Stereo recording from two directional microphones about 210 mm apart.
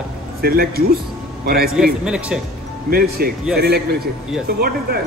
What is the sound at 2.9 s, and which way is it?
Speech, 45° right (ahead or behind).